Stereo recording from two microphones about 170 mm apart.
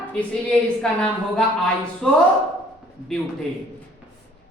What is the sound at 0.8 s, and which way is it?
A woman's voice, 5° left (ahead or behind).